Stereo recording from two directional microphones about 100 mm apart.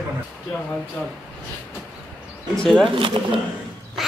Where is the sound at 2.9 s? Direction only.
60° right (ahead or behind).